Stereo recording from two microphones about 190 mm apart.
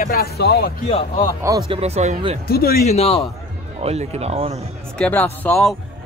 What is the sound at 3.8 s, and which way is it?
Speech, 35° right (ahead or behind).